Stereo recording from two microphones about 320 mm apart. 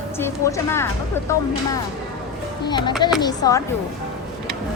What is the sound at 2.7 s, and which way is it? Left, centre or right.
Speech, centre.